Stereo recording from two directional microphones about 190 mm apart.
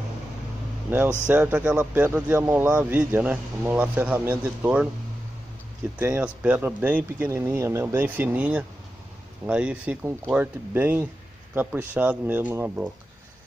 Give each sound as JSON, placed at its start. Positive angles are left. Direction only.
{"t": 0.8, "sound": "speech", "side_deg": -10}
{"t": 5.9, "sound": "speech", "side_deg": -10}